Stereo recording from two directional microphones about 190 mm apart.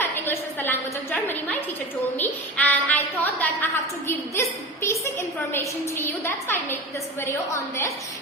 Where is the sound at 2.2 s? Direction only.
10° left (ahead or behind).